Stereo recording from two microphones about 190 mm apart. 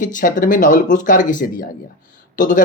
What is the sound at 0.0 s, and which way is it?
Speech, 45° left (ahead or behind).